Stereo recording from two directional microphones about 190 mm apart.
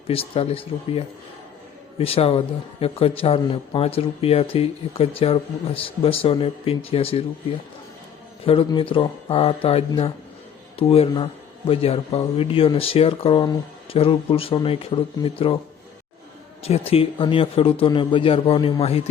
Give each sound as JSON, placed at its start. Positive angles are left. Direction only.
{"t": 0.1, "sound": "speech", "side_deg": 30}
{"t": 8.4, "sound": "speech", "side_deg": 30}
{"t": 16.6, "sound": "speech", "side_deg": 30}